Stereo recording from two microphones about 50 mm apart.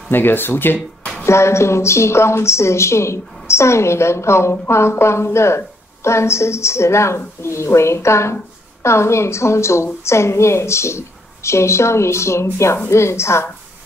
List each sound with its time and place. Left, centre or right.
0.1 s speech: left
1.2 s a woman's voice: left